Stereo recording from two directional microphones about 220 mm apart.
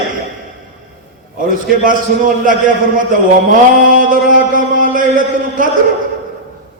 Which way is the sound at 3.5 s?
40° right (ahead or behind).